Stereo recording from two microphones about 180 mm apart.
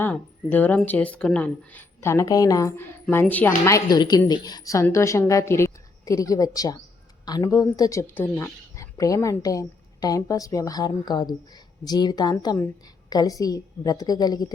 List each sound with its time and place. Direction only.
0.0 s a woman's voice: 10° left (ahead or behind)